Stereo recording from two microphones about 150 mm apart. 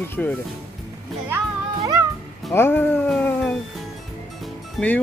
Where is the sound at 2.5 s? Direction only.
15° left (ahead or behind).